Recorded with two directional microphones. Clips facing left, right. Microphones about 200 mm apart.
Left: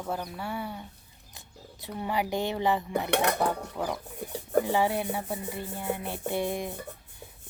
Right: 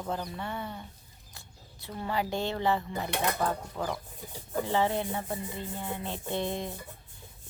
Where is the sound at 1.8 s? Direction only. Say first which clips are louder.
Left 2 dB; 15° left (ahead or behind).